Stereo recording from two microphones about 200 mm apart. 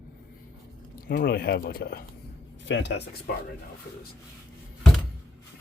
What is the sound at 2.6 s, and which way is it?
Speech, 60° left (ahead or behind).